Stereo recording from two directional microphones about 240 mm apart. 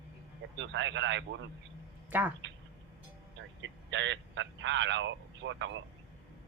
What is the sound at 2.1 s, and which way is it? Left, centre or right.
Speech, centre.